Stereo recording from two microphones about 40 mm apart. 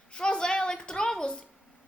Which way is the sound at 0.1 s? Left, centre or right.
Left.